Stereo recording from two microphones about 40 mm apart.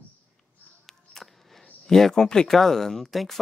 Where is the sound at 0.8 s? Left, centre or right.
Centre.